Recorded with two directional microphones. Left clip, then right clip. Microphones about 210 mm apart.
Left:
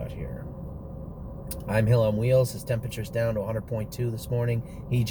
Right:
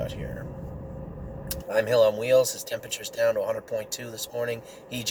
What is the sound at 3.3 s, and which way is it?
Speech, 15° right (ahead or behind).